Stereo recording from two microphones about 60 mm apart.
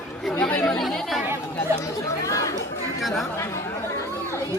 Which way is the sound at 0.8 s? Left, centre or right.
Centre.